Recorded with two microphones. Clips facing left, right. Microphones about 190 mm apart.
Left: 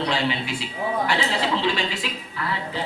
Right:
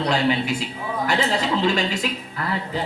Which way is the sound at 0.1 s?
45° right (ahead or behind).